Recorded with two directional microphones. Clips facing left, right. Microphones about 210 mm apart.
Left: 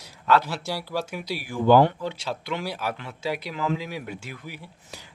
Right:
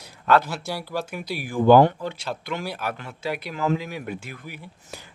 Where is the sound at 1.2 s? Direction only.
50° right (ahead or behind).